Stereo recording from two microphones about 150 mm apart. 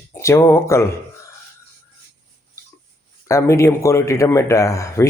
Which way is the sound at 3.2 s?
20° left (ahead or behind).